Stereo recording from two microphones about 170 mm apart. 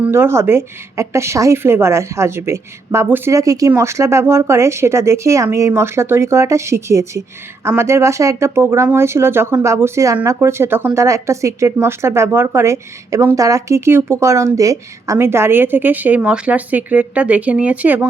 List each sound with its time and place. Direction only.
0.0 s speech: 15° right (ahead or behind)